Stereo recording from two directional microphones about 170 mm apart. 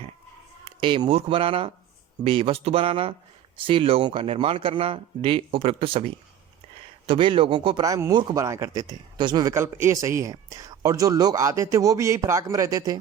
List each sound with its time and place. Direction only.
0.6 s speech: 30° right (ahead or behind)
7.1 s speech: 30° right (ahead or behind)